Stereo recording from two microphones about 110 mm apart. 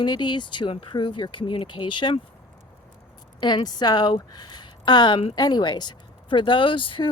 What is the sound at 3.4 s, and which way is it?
Speech, 45° left (ahead or behind).